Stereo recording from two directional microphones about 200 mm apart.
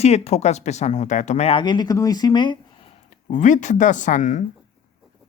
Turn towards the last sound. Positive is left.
turn(degrees=40)  # may be behind; listen again after turning